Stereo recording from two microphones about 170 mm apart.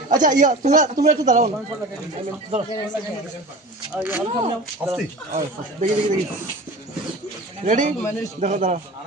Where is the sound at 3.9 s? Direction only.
10° right (ahead or behind).